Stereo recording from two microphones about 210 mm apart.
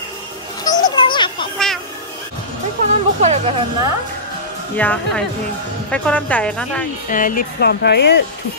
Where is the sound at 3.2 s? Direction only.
30° right (ahead or behind).